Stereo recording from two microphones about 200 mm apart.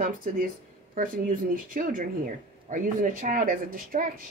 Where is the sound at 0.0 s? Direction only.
45° right (ahead or behind).